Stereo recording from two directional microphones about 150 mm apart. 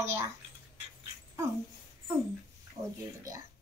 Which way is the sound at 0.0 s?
20° right (ahead or behind).